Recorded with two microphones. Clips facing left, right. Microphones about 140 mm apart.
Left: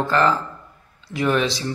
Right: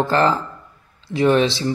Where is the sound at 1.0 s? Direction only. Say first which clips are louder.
Right 5 dB; 30° right (ahead or behind).